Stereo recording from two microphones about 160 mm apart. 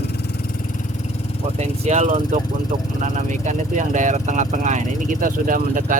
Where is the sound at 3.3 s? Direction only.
50° right (ahead or behind).